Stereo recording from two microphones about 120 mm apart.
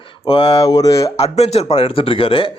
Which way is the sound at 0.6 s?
30° left (ahead or behind).